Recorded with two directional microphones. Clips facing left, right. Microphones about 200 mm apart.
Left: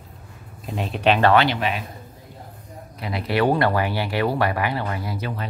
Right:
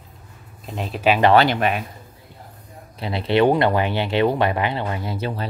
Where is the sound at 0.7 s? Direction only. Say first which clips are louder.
Even; centre (ahead or behind).